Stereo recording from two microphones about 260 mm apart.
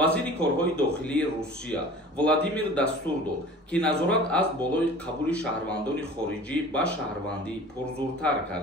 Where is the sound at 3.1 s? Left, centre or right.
Centre.